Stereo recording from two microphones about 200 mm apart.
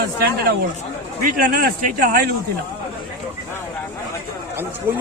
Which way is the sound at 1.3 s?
45° right (ahead or behind).